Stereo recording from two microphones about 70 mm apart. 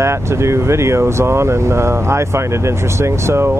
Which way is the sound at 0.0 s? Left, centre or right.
Right.